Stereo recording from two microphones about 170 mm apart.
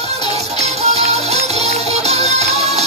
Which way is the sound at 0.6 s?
40° right (ahead or behind).